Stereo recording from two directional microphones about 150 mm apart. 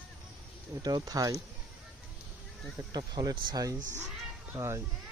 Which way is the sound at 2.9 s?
25° right (ahead or behind).